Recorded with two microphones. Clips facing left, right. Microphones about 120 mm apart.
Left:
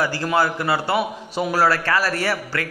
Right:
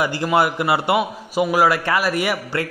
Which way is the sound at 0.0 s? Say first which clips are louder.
Right 2 dB; 15° right (ahead or behind).